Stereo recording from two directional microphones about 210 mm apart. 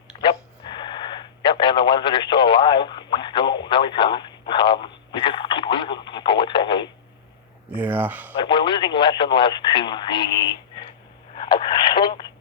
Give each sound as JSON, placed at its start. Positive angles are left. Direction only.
{"t": 0.2, "sound": "radio", "side_deg": 20}
{"t": 7.7, "sound": "a sound", "side_deg": -10}
{"t": 8.4, "sound": "speech", "side_deg": 20}
{"t": 11.3, "sound": "radio", "side_deg": 20}